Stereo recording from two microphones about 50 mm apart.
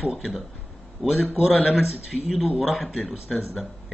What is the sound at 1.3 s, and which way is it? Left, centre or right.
Speech, centre.